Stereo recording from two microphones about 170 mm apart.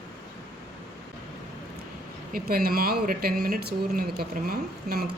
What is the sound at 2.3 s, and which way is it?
Speech, 60° right (ahead or behind).